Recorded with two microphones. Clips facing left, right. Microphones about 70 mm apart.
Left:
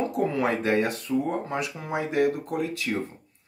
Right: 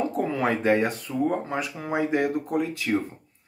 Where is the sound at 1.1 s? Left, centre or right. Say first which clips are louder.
Left 3 dB; centre.